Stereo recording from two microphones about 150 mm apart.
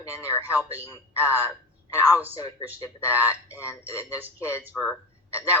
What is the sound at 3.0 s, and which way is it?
Speech, 10° right (ahead or behind).